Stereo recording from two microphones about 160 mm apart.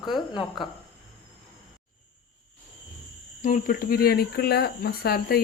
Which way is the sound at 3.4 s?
60° left (ahead or behind).